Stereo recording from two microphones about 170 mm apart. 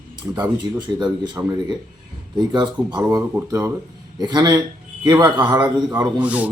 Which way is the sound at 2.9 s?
15° right (ahead or behind).